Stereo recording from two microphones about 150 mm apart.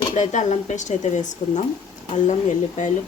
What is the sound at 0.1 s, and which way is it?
Speech, 55° left (ahead or behind).